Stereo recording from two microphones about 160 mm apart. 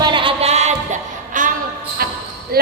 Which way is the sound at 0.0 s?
30° right (ahead or behind).